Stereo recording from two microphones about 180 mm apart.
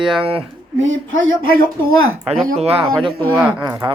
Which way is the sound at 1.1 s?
90° right.